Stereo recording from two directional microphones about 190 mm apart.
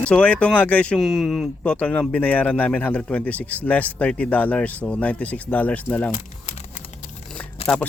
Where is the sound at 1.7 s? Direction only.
5° left (ahead or behind).